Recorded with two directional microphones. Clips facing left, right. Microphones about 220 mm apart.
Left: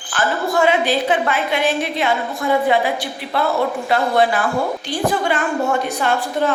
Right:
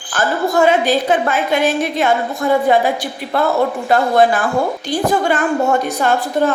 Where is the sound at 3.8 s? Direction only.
45° right (ahead or behind).